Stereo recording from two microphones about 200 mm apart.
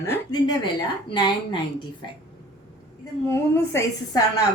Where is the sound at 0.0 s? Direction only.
20° left (ahead or behind).